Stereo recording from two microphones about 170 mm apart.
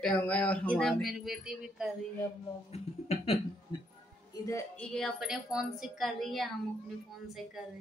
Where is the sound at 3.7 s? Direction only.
30° left (ahead or behind).